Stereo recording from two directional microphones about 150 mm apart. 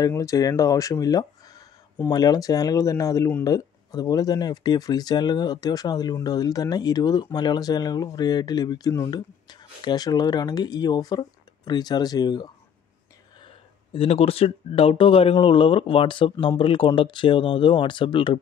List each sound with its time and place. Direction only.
0.0 s speech: 20° left (ahead or behind)
13.9 s speech: 40° left (ahead or behind)